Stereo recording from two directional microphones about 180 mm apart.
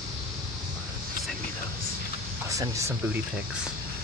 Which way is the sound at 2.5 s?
15° right (ahead or behind).